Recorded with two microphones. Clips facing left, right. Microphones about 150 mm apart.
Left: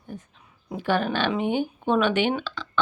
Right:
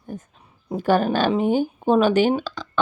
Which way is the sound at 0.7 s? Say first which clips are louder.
Right 5 dB; 40° right (ahead or behind).